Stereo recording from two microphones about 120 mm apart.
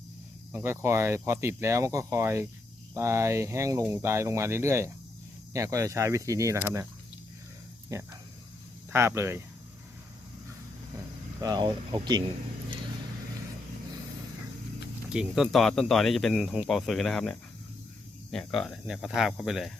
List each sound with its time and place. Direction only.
0.5 s speech: 20° right (ahead or behind)
7.9 s speech: 25° right (ahead or behind)
11.3 s speech: 35° right (ahead or behind)
15.1 s speech: 5° right (ahead or behind)